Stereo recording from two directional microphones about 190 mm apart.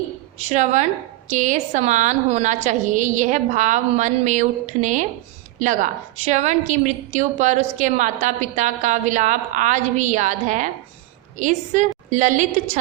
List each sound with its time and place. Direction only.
0.3 s a woman's voice: 40° right (ahead or behind)